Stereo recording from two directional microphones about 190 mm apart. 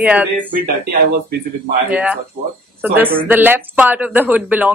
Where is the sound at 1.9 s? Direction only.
5° right (ahead or behind).